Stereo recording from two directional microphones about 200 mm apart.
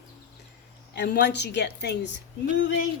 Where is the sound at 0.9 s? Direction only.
55° left (ahead or behind).